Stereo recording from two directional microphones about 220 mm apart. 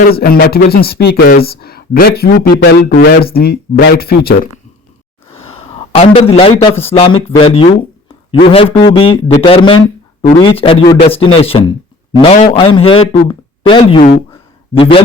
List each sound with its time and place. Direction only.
0.2 s speech: 45° left (ahead or behind)
5.4 s a man's voice: 25° left (ahead or behind)